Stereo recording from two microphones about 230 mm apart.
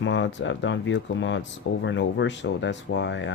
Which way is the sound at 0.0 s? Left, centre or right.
Left.